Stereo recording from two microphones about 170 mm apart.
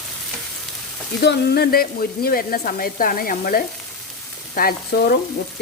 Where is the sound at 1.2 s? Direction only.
70° left (ahead or behind).